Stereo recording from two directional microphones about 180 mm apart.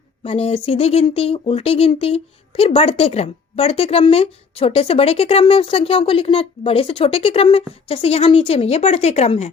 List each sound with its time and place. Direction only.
0.2 s speech: 35° left (ahead or behind)